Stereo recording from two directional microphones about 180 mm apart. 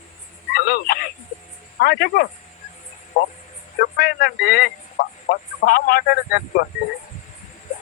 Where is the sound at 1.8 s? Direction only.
60° left (ahead or behind).